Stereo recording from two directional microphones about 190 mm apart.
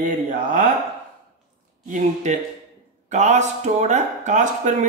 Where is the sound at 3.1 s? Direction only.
40° right (ahead or behind).